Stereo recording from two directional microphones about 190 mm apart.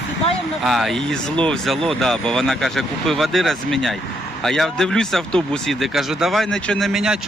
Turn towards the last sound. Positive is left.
turn(degrees=-5)  # may be behind; listen again after turning